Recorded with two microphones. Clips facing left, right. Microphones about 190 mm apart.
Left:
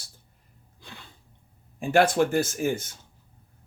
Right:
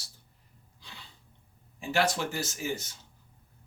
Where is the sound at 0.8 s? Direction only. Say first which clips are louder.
Left 5 dB; 50° left (ahead or behind).